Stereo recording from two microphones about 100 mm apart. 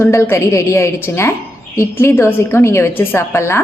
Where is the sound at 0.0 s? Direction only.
25° left (ahead or behind).